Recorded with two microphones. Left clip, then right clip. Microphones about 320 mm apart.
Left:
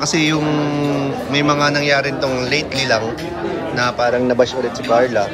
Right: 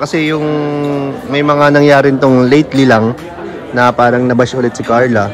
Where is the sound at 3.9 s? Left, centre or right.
Right.